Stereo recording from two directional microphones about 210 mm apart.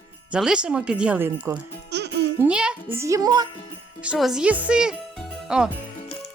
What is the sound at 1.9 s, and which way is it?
Music, 55° right (ahead or behind).